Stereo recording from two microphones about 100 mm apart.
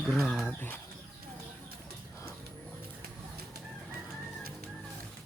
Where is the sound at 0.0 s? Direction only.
5° left (ahead or behind).